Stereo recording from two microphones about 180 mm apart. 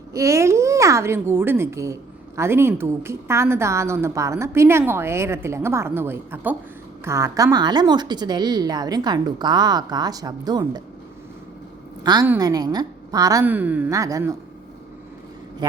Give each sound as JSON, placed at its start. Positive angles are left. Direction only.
{"t": 0.1, "sound": "a woman's voice", "side_deg": -15}
{"t": 12.0, "sound": "a woman's voice", "side_deg": -20}